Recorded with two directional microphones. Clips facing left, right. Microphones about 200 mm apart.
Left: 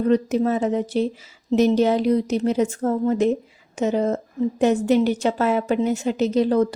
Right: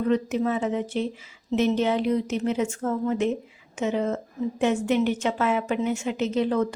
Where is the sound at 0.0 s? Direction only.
40° left (ahead or behind).